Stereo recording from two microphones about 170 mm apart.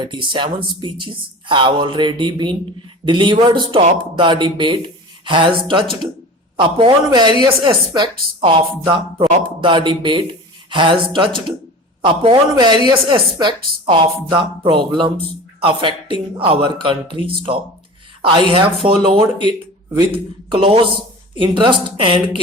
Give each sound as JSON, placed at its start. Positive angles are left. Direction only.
{"t": 0.0, "sound": "speech", "side_deg": -30}